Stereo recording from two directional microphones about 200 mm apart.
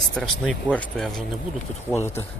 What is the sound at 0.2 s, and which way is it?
Speech, 5° left (ahead or behind).